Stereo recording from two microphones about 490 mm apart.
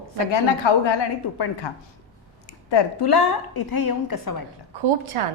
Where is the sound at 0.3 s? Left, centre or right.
Left.